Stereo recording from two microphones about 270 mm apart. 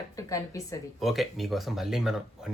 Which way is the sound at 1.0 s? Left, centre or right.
Centre.